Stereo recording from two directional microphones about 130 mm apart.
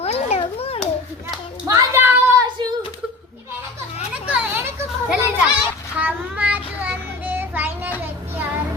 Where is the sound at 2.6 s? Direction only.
35° right (ahead or behind).